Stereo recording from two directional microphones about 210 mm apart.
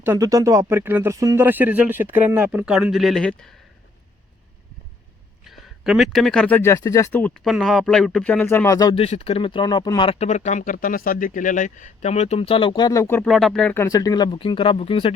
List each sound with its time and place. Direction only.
0.0 s speech: 15° right (ahead or behind); by 3.5 s 5° left (ahead or behind)
5.5 s speech: centre (ahead or behind); by 15.1 s 25° left (ahead or behind)